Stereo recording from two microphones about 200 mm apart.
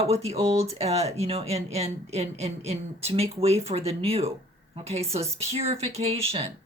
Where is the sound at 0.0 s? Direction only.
30° right (ahead or behind).